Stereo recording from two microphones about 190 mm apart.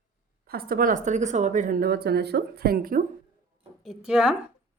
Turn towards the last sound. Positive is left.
turn(degrees=-5)  # may be behind; listen again after turning